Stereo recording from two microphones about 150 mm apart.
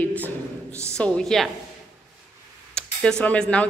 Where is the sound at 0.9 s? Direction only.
5° left (ahead or behind).